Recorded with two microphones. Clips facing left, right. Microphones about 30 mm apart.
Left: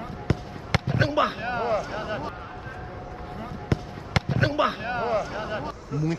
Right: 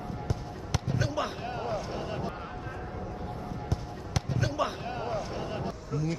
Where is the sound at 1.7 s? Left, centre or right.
Left.